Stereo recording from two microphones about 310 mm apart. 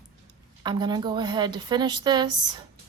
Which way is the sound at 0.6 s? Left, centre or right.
Centre.